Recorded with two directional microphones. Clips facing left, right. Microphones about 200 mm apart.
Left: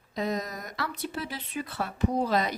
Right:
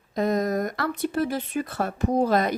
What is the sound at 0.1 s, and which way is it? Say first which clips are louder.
Speech: right 8 dB; 50° right (ahead or behind).